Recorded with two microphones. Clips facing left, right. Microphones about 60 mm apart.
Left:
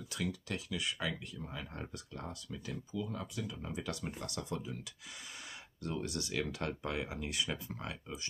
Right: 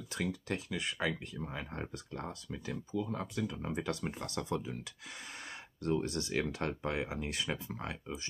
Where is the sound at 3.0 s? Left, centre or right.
Right.